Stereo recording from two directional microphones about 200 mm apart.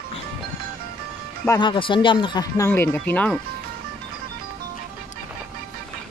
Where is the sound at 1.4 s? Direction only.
15° left (ahead or behind).